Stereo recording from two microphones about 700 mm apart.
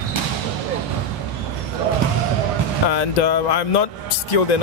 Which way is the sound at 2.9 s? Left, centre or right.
Left.